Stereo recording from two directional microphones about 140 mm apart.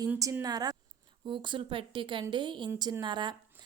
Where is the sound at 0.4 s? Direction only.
25° right (ahead or behind).